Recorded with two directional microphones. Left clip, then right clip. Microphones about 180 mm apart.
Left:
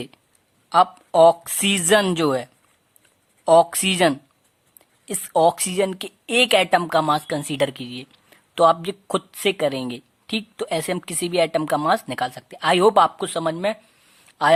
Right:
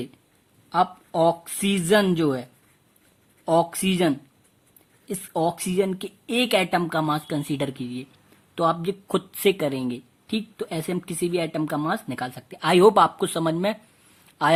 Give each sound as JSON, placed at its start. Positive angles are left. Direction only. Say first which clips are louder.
{"t": 0.7, "sound": "a woman's voice", "louder": "left 6 dB", "side_deg": 35}